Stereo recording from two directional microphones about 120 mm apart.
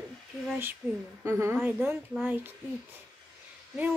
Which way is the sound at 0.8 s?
15° right (ahead or behind).